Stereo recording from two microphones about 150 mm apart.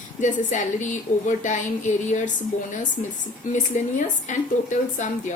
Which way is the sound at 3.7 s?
55° left (ahead or behind).